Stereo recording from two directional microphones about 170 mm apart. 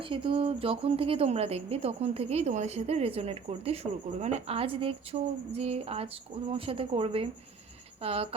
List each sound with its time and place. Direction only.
0.0 s a woman's voice: 30° right (ahead or behind)